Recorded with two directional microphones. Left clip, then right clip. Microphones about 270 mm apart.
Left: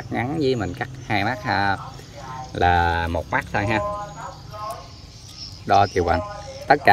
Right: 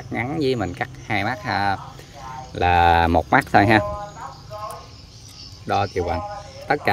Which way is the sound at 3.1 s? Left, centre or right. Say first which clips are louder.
Right 7 dB; right.